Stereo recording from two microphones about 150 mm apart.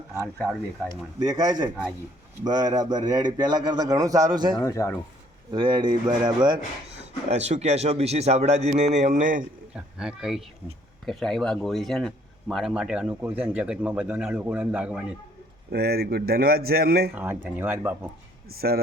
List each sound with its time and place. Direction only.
1.2 s a man's voice: 25° right (ahead or behind)
4.6 s speech: 20° left (ahead or behind)
5.5 s a man's voice: 30° right (ahead or behind)
7.3 s a man's voice: 50° right (ahead or behind)
9.7 s speech: 5° right (ahead or behind)
15.7 s speech: 90° right
17.2 s speech: 15° right (ahead or behind)